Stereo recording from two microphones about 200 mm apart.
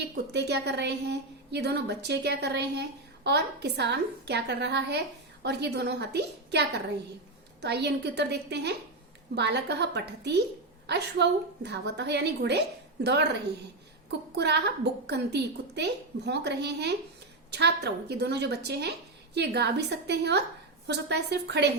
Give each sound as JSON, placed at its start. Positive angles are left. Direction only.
{"t": 0.3, "sound": "a woman's voice", "side_deg": -55}
{"t": 14.3, "sound": "a woman's voice", "side_deg": -55}